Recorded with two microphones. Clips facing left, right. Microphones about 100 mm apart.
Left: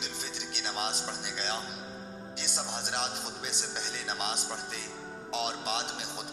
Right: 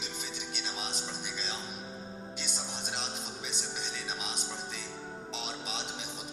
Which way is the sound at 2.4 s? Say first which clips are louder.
Left 5 dB; 60° left (ahead or behind).